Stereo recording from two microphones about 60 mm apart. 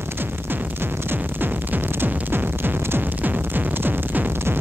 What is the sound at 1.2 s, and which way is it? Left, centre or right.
Music, right.